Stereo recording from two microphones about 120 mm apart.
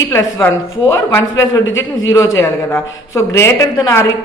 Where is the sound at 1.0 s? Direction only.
25° left (ahead or behind).